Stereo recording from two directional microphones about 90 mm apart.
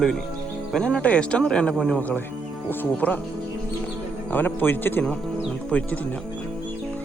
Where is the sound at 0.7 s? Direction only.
5° left (ahead or behind).